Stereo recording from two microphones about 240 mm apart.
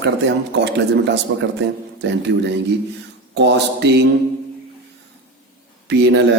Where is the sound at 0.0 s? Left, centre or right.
Right.